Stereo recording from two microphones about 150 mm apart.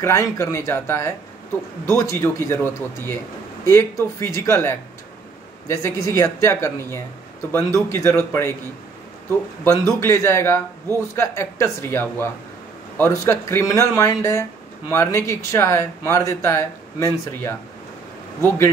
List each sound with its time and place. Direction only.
0.0 s speech: 20° left (ahead or behind)
9.9 s speech: 20° left (ahead or behind)